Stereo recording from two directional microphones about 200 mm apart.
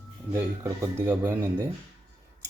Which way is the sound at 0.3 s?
15° right (ahead or behind).